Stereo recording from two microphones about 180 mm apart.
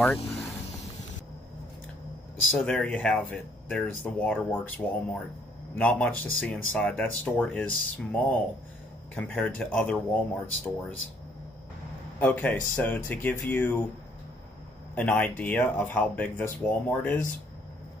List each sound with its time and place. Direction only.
0.0 s vehicle: 5° left (ahead or behind)
2.5 s speech: 5° left (ahead or behind)
12.2 s speech: 10° left (ahead or behind)
15.0 s speech: 10° left (ahead or behind)